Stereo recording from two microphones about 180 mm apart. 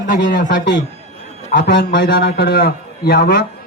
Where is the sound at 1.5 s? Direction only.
70° left (ahead or behind).